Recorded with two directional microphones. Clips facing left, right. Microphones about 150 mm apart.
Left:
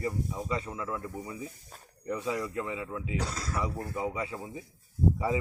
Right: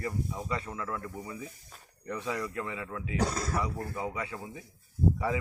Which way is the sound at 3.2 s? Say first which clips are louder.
Right 5 dB; 50° right (ahead or behind).